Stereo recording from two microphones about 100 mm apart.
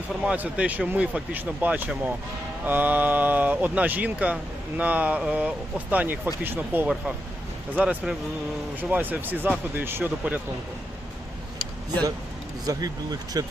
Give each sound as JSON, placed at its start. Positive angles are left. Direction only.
{"t": 0.3, "sound": "speech", "side_deg": -15}
{"t": 12.6, "sound": "speech", "side_deg": -40}